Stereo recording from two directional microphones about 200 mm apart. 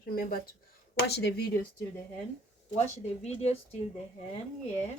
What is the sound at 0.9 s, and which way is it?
Speech, 55° left (ahead or behind).